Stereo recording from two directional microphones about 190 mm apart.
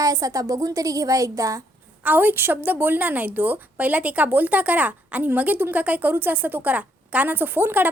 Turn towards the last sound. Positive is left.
turn(degrees=-10)  # may be behind; listen again after turning